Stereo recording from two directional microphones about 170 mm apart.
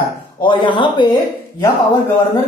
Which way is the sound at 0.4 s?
30° left (ahead or behind).